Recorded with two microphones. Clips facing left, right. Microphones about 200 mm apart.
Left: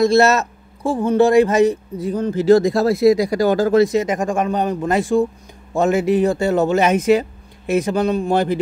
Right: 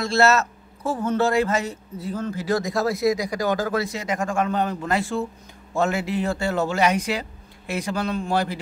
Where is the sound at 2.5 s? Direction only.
30° left (ahead or behind).